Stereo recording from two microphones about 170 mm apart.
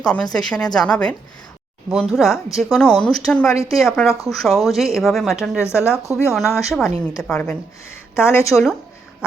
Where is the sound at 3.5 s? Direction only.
20° left (ahead or behind).